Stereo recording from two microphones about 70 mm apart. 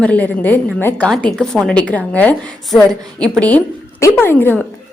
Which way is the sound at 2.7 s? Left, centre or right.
Centre.